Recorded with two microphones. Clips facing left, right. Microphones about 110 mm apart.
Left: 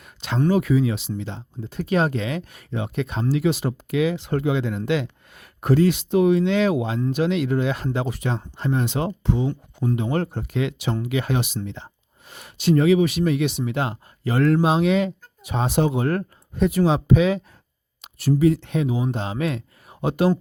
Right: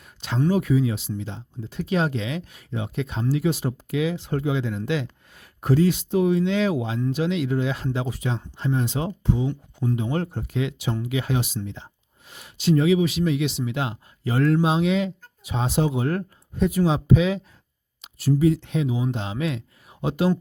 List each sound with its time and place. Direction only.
0.0 s a sound: 75° left (ahead or behind)
0.5 s speech: 90° left
1.2 s speech: 65° left (ahead or behind)
3.3 s speech: 85° left; by 8.4 s 65° left (ahead or behind)
8.4 s speech: 55° left (ahead or behind)
12.3 s speech: 55° left (ahead or behind)
18.0 s speech: 65° left (ahead or behind)
19.1 s speech: 45° left (ahead or behind)